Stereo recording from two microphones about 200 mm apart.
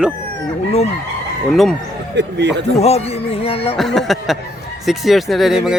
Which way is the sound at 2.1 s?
60° right (ahead or behind).